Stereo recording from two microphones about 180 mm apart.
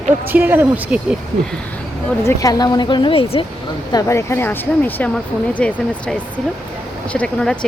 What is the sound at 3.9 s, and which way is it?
Speech, 15° left (ahead or behind).